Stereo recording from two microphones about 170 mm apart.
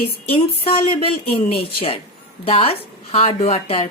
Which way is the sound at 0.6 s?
35° left (ahead or behind).